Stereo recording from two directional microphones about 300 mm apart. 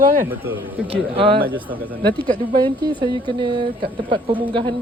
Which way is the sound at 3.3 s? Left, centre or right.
Centre.